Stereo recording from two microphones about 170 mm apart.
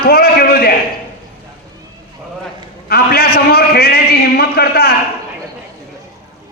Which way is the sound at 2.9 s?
65° left (ahead or behind).